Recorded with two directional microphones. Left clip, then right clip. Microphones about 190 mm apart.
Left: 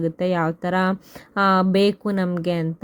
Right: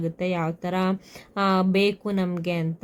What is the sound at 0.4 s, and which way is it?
Speech, 15° left (ahead or behind).